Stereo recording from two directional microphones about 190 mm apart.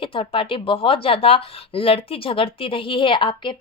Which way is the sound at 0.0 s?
25° left (ahead or behind).